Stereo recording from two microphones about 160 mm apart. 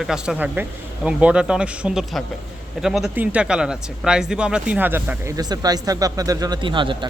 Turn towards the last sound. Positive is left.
turn(degrees=-30)  # may be behind; listen again after turning